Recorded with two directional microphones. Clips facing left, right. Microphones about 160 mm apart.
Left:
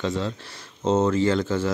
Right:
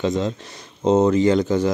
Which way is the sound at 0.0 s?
15° right (ahead or behind).